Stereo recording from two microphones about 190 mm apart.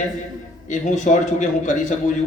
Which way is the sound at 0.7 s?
40° left (ahead or behind).